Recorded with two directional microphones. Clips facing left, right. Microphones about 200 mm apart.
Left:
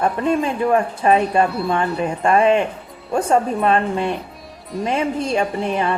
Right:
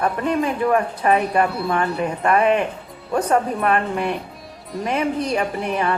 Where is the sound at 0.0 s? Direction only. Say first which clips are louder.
Left 2 dB; 25° left (ahead or behind).